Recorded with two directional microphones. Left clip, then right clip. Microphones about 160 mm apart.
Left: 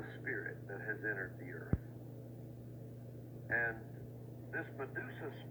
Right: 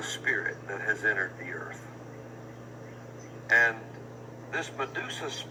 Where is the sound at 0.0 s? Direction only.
50° right (ahead or behind).